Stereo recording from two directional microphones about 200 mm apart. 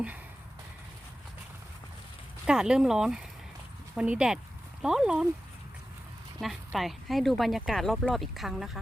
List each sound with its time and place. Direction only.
2.5 s speech: 5° right (ahead or behind)
6.4 s speech: centre (ahead or behind)